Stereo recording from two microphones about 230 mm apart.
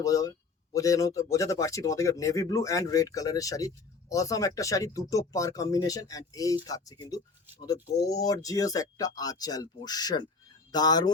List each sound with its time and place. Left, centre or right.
0.0 s speech: centre